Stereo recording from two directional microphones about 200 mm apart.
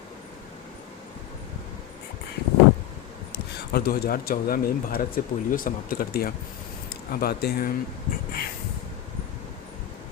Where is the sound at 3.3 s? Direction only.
50° left (ahead or behind).